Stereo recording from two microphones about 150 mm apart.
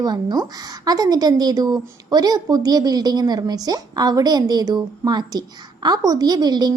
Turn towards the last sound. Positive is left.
turn(degrees=-25)  # may be behind; listen again after turning